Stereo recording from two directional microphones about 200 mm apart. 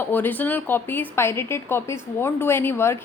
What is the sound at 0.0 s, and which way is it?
A woman's voice, 10° left (ahead or behind).